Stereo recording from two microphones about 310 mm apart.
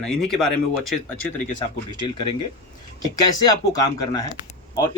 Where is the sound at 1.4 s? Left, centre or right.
Centre.